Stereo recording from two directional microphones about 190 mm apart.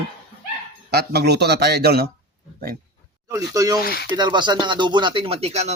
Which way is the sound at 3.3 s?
20° right (ahead or behind).